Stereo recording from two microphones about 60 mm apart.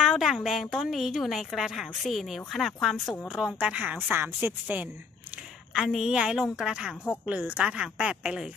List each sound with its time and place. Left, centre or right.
0.0 s a woman's voice: centre
3.3 s a woman's voice: centre
4.1 s a woman's voice: right
5.7 s a woman's voice: centre
7.2 s a woman's voice: right